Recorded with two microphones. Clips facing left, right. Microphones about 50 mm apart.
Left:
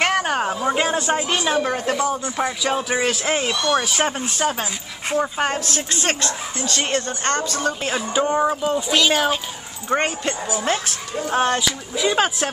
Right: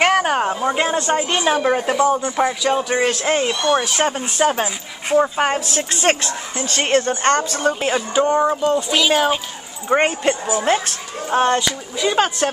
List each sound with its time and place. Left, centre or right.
0.0 s a sound: centre
0.7 s speech: centre
1.4 s speech: centre
2.4 s speech: centre
4.2 s speech: centre
5.9 s speech: right
7.9 s speech: centre
9.8 s speech: centre
10.9 s speech: centre